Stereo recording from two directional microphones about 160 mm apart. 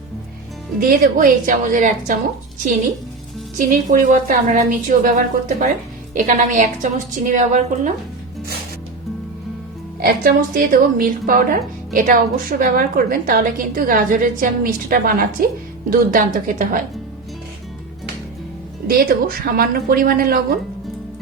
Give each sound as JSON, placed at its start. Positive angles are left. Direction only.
{"t": 0.8, "sound": "a woman's voice", "side_deg": -60}
{"t": 3.6, "sound": "a woman's voice", "side_deg": -55}
{"t": 10.0, "sound": "a woman's voice", "side_deg": -65}
{"t": 18.9, "sound": "a woman's voice", "side_deg": -65}